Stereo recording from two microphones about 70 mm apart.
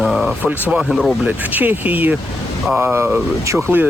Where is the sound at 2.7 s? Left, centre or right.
Right.